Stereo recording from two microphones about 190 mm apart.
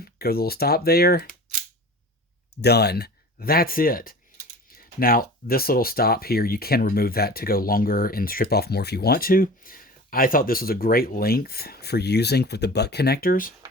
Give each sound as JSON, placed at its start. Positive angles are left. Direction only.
{"t": 0.0, "sound": "speech", "side_deg": 55}
{"t": 2.6, "sound": "speech", "side_deg": 60}